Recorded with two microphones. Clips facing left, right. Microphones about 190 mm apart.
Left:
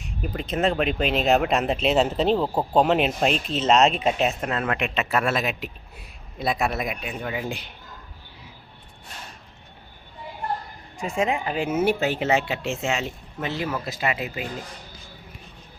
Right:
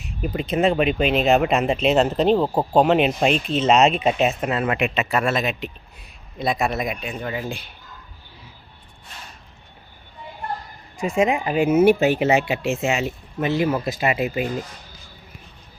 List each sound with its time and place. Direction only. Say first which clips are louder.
0.2 s speech: right 4 dB; 5° right (ahead or behind)
7.4 s speech: right 1 dB; 15° left (ahead or behind)
11.2 s speech: right 5 dB; 15° right (ahead or behind)
13.7 s speech: right 5 dB; 25° right (ahead or behind)